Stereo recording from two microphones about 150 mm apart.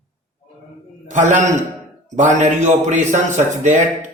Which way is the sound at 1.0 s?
55° right (ahead or behind).